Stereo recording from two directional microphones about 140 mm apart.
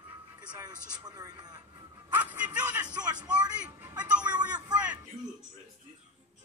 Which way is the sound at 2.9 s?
30° right (ahead or behind).